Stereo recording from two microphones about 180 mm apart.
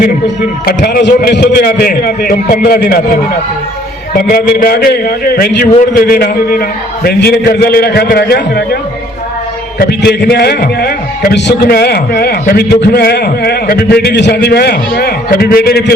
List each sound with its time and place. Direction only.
0.6 s a man's voice: 55° left (ahead or behind)